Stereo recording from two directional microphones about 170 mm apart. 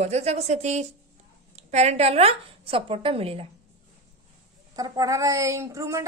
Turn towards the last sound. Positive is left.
turn(degrees=-15)  # may be behind; listen again after turning